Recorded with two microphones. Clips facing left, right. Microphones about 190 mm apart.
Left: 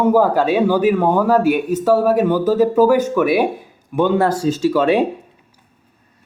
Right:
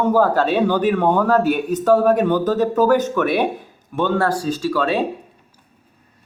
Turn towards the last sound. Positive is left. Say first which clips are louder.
# left 5 dB
turn(degrees=20)  # may be behind; listen again after turning